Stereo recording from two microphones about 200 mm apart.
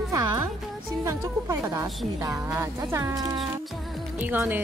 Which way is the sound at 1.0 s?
15° right (ahead or behind).